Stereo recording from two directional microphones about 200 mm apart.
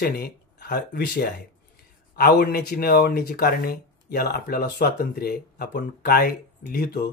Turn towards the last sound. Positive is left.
turn(degrees=50)  # may be behind; listen again after turning